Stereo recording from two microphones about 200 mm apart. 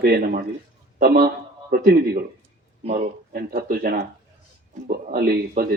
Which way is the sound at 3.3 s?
45° right (ahead or behind).